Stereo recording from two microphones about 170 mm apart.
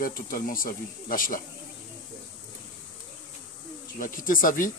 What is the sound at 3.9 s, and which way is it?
Speech, 55° left (ahead or behind).